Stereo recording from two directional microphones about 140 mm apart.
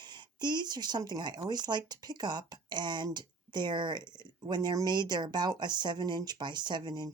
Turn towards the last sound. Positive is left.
turn(degrees=-30)  # may be behind; listen again after turning